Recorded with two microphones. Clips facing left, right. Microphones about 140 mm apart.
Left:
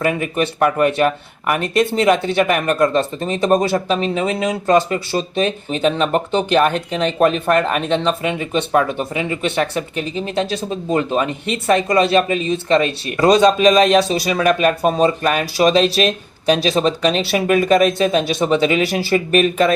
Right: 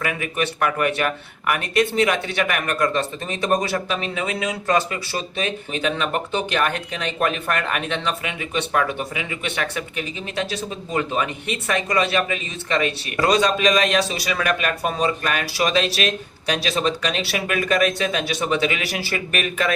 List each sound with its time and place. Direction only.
0.0 s speech: 35° left (ahead or behind)